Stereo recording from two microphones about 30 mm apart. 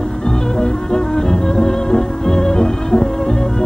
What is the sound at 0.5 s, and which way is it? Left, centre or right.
Music, left.